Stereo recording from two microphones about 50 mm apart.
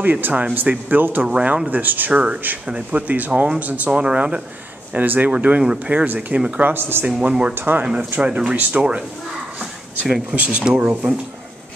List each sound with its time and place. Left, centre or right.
0.0 s speech: right
1.2 s speech: right
1.7 s speech: right
2.6 s speech: right
4.0 s speech: right
4.9 s speech: right
6.6 s speech: right
7.2 s speech: right
7.5 s speech: right
7.8 s speech: centre
9.6 s a sound: centre
10.3 s speech: right